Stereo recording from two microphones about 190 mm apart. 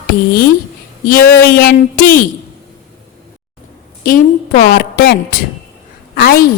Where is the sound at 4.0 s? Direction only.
50° left (ahead or behind).